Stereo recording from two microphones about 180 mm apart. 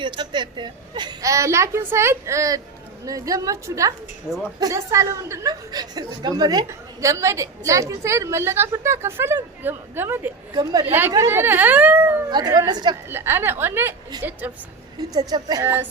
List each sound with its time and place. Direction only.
0.0 s a woman's voice: 25° right (ahead or behind)
4.3 s a woman's voice: 5° right (ahead or behind)
4.6 s a woman's voice: 20° right (ahead or behind)
12.3 s a woman's voice: 20° right (ahead or behind)
13.1 s a woman's voice: 10° right (ahead or behind)
15.1 s a woman's voice: 20° right (ahead or behind)